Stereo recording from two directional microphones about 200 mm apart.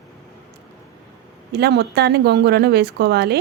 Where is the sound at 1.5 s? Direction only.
55° right (ahead or behind).